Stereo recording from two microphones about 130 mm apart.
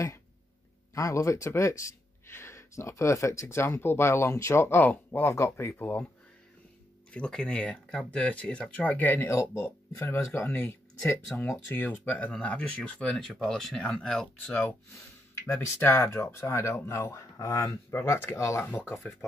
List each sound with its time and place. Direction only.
0.9 s speech: 25° left (ahead or behind)
7.1 s speech: 5° left (ahead or behind)